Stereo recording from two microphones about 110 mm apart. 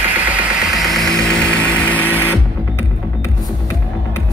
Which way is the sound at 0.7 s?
Centre (ahead or behind).